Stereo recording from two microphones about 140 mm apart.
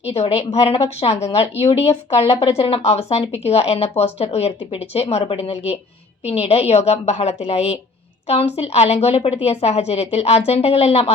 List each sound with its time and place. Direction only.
0.1 s speech: 50° left (ahead or behind)